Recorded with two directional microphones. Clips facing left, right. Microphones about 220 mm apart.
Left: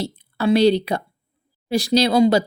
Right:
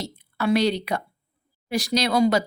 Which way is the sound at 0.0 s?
30° left (ahead or behind).